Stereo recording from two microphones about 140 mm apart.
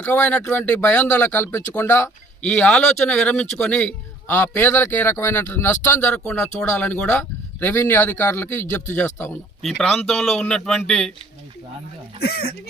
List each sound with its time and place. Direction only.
0.0 s a man's voice: 15° left (ahead or behind)
9.6 s a man's voice: 5° left (ahead or behind)
12.2 s speech: 90° left